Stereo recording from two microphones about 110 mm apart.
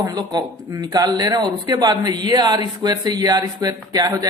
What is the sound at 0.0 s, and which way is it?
Speech, 35° right (ahead or behind).